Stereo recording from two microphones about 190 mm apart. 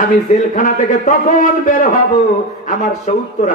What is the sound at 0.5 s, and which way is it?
A man's voice, 45° left (ahead or behind).